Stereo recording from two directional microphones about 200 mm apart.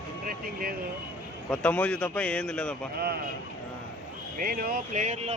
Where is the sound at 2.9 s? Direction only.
50° right (ahead or behind).